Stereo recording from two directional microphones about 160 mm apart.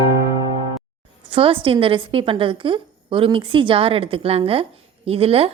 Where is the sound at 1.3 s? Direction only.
35° right (ahead or behind).